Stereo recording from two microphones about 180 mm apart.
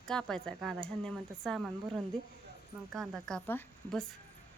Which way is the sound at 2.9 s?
Centre (ahead or behind).